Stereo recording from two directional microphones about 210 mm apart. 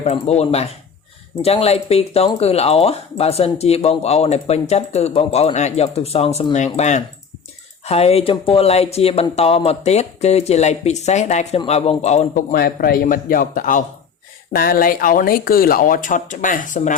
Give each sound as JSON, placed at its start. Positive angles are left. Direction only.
{"t": 0.0, "sound": "speech", "side_deg": 30}